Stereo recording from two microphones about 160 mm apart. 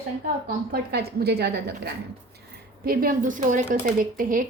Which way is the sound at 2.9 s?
65° right (ahead or behind).